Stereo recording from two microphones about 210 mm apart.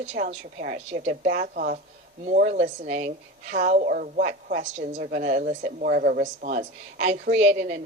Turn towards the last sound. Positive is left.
turn(degrees=-35)  # may be behind; listen again after turning